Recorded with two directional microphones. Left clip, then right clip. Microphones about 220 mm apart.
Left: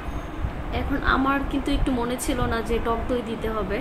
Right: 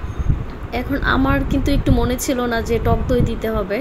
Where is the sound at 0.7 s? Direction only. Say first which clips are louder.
Right 4 dB; 30° right (ahead or behind).